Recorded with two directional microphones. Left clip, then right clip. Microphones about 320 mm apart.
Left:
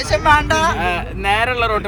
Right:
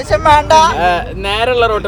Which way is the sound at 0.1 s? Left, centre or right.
Right.